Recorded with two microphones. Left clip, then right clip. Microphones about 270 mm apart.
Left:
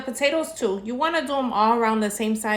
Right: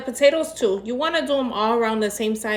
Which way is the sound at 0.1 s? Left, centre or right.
Centre.